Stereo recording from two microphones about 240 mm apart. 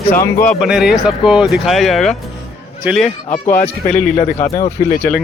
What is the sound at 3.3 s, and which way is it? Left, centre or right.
Speech, left.